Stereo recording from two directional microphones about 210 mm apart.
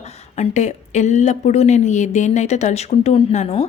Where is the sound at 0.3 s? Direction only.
35° left (ahead or behind).